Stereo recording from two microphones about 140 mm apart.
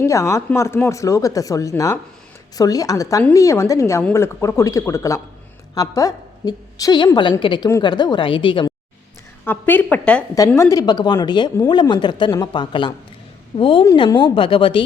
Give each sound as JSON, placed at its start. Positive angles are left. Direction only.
{"t": 0.0, "sound": "speech", "side_deg": 20}
{"t": 9.4, "sound": "a woman's voice", "side_deg": 15}
{"t": 10.3, "sound": "speech", "side_deg": 20}